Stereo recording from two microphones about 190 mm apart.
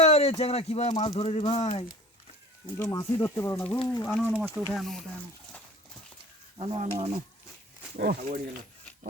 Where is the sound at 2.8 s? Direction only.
15° left (ahead or behind).